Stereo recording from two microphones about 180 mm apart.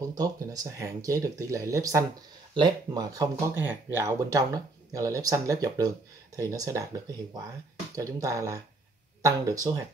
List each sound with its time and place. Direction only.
0.0 s speech: 20° right (ahead or behind)
7.9 s speech: 20° right (ahead or behind)